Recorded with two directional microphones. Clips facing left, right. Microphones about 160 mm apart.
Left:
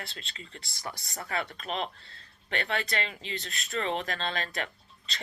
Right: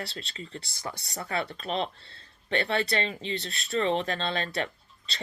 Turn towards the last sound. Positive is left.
turn(degrees=-30)  # may be behind; listen again after turning